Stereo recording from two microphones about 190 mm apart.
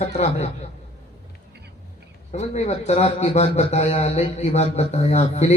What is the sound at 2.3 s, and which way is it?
A man's voice, 35° left (ahead or behind).